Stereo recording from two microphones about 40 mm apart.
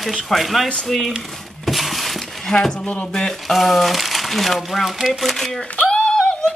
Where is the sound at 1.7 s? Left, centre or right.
Centre.